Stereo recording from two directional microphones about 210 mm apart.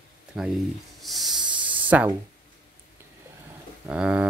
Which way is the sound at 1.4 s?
25° right (ahead or behind).